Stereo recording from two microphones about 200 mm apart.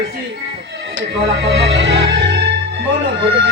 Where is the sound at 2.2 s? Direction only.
55° right (ahead or behind).